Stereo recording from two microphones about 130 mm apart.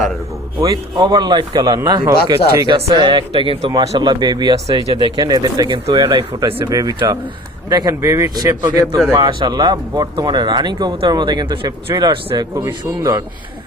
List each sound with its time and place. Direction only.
0.6 s a man's voice: 30° right (ahead or behind)
6.7 s a man's voice: 30° right (ahead or behind)